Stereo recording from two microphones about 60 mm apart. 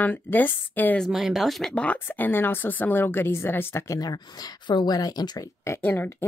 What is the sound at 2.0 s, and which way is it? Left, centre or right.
A woman's voice, left.